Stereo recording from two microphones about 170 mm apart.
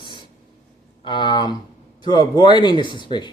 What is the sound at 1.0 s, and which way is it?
A man's voice, 25° left (ahead or behind).